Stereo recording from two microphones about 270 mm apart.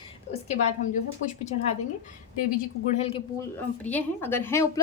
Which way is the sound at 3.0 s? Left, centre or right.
Left.